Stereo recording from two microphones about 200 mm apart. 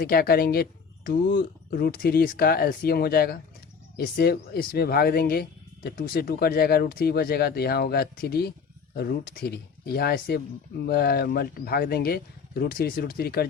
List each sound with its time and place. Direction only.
0.0 s speech: 50° left (ahead or behind)